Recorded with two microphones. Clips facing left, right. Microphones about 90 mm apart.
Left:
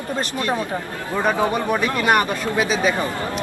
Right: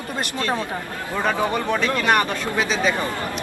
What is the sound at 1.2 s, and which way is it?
Speech, 15° left (ahead or behind).